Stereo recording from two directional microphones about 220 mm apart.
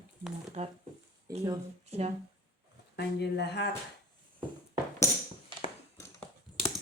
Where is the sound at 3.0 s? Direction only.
50° left (ahead or behind).